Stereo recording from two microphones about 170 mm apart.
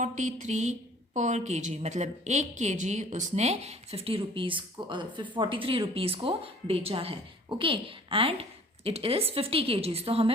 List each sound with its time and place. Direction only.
0.0 s a woman's voice: 45° right (ahead or behind)